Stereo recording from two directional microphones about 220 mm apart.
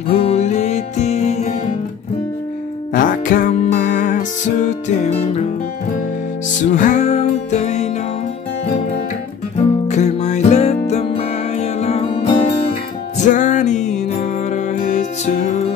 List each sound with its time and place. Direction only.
0.1 s music: 30° left (ahead or behind)
2.9 s music: 40° left (ahead or behind)
6.6 s music: 35° left (ahead or behind)
9.8 s music: 30° left (ahead or behind)